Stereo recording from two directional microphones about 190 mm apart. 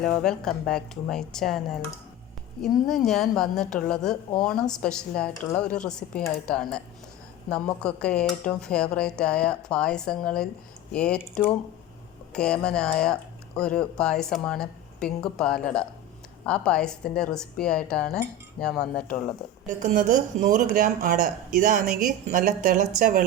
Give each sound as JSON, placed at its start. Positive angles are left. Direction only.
{"t": 0.0, "sound": "speech", "side_deg": 5}
{"t": 19.6, "sound": "speech", "side_deg": -45}